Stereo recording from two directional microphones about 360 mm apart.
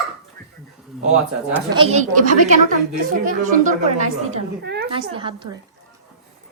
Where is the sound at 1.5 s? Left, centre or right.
Centre; by 4.8 s right.